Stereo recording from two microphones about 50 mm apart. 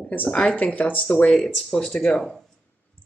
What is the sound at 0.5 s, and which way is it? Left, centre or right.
Speech, left.